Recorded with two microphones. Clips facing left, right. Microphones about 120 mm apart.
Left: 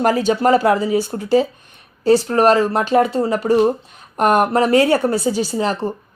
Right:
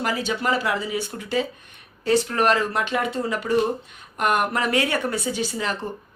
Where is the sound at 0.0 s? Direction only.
45° left (ahead or behind).